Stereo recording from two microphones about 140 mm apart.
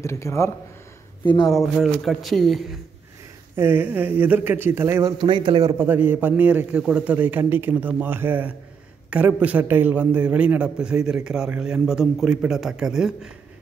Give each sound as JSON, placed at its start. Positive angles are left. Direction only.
{"t": 0.0, "sound": "speech", "side_deg": 20}
{"t": 1.2, "sound": "speech", "side_deg": 30}
{"t": 1.5, "sound": "a man's voice", "side_deg": 0}
{"t": 3.5, "sound": "a man's voice", "side_deg": -15}
{"t": 5.2, "sound": "a man's voice", "side_deg": -35}
{"t": 5.8, "sound": "a man's voice", "side_deg": -15}